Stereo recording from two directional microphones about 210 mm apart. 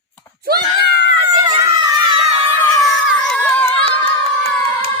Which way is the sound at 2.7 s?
Centre (ahead or behind).